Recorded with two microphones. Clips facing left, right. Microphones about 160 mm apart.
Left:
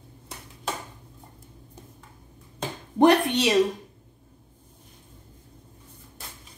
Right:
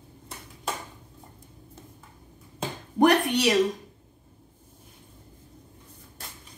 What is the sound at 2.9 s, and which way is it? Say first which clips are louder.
Speech: left 2 dB; 25° left (ahead or behind).